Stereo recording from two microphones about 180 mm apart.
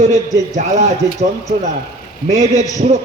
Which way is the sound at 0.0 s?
40° right (ahead or behind).